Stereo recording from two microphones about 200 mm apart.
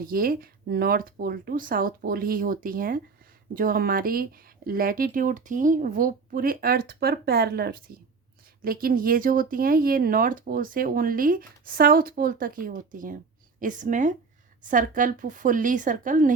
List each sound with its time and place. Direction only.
0.0 s a woman's voice: 45° right (ahead or behind)